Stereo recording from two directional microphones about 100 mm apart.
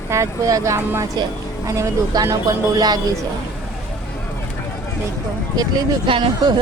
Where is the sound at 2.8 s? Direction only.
40° right (ahead or behind).